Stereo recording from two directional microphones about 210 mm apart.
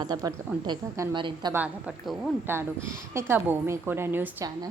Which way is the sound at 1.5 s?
5° right (ahead or behind).